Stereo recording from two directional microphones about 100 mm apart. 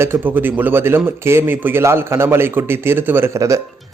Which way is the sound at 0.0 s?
20° right (ahead or behind).